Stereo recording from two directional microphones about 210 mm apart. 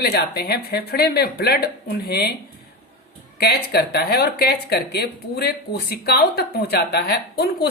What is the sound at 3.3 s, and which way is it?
Speech, 50° left (ahead or behind).